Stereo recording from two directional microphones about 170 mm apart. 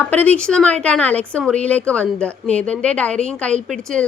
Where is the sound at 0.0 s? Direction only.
10° left (ahead or behind).